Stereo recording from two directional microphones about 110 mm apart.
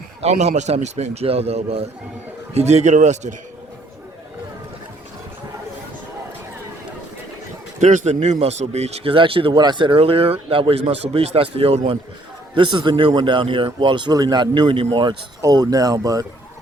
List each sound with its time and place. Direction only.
0.2 s a man's voice: 75° right (ahead or behind)
2.6 s speech: 85° right
7.8 s a man's voice: 90° right
9.1 s a man's voice: 55° right (ahead or behind)
12.5 s speech: 45° right (ahead or behind)
15.4 s speech: 30° right (ahead or behind)